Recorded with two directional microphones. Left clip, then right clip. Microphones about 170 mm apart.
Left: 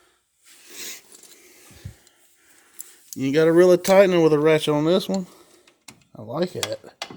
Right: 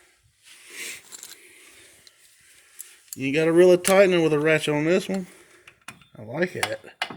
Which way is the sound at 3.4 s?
20° left (ahead or behind).